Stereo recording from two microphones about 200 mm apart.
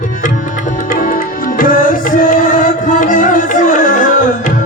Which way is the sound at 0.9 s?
45° left (ahead or behind).